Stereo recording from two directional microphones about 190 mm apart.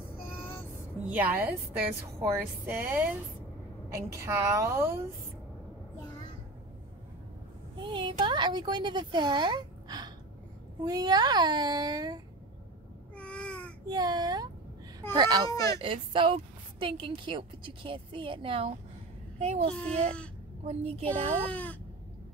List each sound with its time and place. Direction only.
0.4 s vehicle: 10° left (ahead or behind)
1.0 s a woman's voice: 10° right (ahead or behind)
7.8 s a woman's voice: 25° right (ahead or behind)
13.1 s babbling: 5° left (ahead or behind)
13.8 s a woman's voice: 20° right (ahead or behind)
15.5 s speech: 15° left (ahead or behind)
15.8 s a woman's voice: 25° right (ahead or behind)
19.7 s speech: 5° left (ahead or behind)
20.6 s a woman's voice: 30° right (ahead or behind)
21.5 s speech: 10° left (ahead or behind)